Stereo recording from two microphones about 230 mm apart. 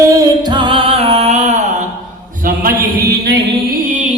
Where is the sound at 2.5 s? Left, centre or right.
Right.